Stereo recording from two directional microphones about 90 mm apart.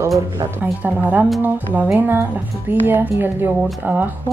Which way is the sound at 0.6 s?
20° right (ahead or behind).